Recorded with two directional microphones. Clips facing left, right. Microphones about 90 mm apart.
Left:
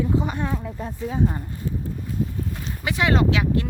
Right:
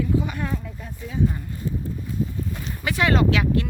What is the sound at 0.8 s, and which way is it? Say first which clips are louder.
Speech: left 2 dB; 40° left (ahead or behind).